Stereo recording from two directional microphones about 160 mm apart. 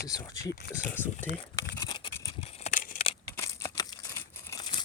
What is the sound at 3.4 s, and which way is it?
Crumpling, 20° left (ahead or behind).